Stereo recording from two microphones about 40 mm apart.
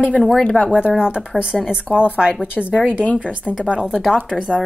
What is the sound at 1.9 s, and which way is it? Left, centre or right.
Speech, centre.